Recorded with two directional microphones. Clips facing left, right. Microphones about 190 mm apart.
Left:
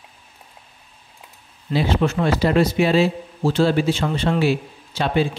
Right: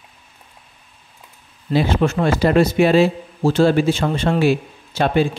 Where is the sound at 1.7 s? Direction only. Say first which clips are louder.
Right 2 dB; 50° right (ahead or behind).